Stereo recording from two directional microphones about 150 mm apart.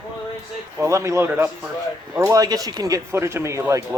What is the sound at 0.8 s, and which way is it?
Speech, 20° right (ahead or behind).